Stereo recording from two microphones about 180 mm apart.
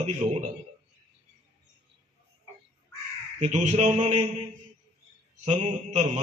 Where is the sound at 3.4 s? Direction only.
40° right (ahead or behind).